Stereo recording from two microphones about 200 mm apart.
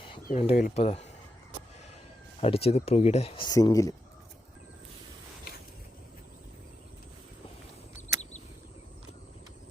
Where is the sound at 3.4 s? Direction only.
15° left (ahead or behind).